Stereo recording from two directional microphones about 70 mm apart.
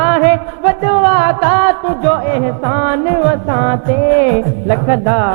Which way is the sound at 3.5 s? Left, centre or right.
Centre.